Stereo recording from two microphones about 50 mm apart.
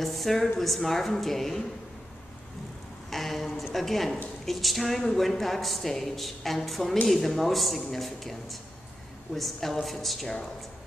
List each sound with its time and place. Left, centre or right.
0.0 s a woman's voice: centre
3.1 s a woman's voice: centre